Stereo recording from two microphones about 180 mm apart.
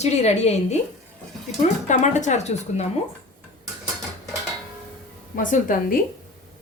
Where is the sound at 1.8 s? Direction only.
40° left (ahead or behind).